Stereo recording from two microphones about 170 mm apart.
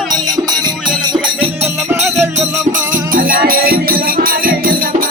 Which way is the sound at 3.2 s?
55° right (ahead or behind).